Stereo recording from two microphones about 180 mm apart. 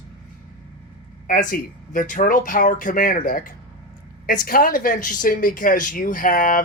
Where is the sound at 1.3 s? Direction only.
50° left (ahead or behind).